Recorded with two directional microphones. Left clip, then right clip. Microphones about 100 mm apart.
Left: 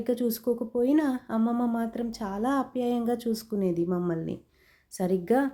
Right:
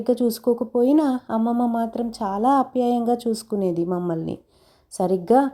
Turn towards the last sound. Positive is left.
turn(degrees=-45)  # may be behind; listen again after turning